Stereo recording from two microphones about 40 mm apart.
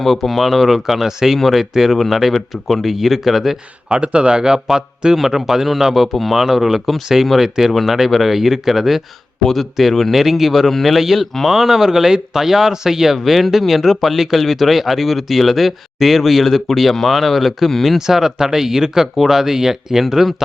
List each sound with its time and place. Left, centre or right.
0.0 s speech: centre
3.8 s a man's voice: right; by 20.3 s centre